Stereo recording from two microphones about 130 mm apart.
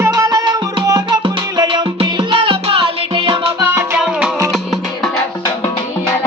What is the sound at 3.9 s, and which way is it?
Music, 5° right (ahead or behind).